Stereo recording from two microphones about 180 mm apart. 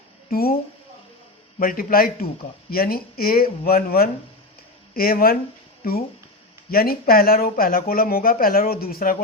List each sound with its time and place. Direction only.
0.3 s a woman's voice: 55° left (ahead or behind)
1.5 s speech: 55° left (ahead or behind)
6.7 s speech: 55° left (ahead or behind)